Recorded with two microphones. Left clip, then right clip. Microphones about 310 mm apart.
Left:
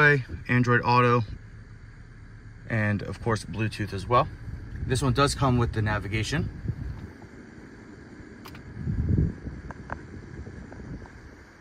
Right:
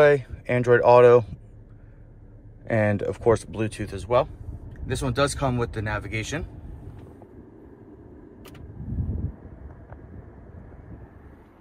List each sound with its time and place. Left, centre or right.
0.0 s speech: centre
2.7 s speech: centre